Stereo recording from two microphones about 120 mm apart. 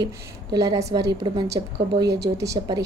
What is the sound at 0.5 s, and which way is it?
A woman's voice, 30° right (ahead or behind).